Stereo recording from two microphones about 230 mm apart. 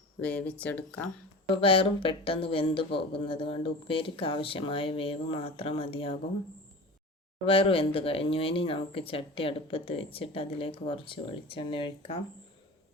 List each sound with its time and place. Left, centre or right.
0.2 s speech: centre
1.6 s speech: left
7.4 s speech: left